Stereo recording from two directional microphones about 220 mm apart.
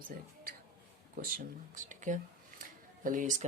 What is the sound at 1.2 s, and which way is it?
Speech, 35° right (ahead or behind).